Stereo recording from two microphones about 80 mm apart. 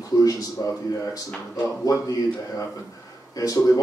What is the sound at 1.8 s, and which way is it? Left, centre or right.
Speech, left.